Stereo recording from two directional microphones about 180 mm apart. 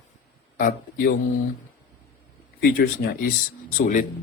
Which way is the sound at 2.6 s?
55° left (ahead or behind).